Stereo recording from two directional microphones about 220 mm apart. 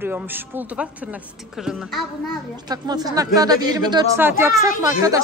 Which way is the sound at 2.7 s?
15° right (ahead or behind).